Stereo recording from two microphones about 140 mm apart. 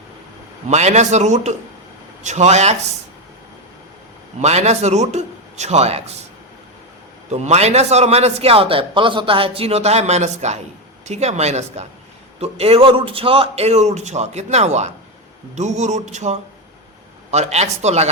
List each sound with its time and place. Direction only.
0.7 s a man's voice: 55° right (ahead or behind)
4.4 s a man's voice: 55° right (ahead or behind)
7.3 s a man's voice: 50° right (ahead or behind)